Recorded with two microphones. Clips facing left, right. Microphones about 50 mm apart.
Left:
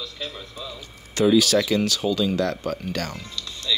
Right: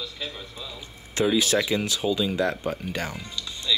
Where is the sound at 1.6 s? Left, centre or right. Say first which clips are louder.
Left 3 dB; centre.